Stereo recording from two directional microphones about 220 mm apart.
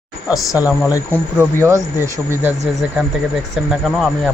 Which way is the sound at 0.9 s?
15° left (ahead or behind).